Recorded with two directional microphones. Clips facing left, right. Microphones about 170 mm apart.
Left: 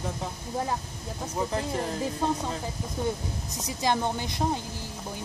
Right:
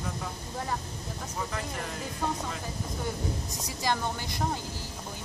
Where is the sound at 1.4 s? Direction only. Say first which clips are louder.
Left 7 dB; 30° left (ahead or behind).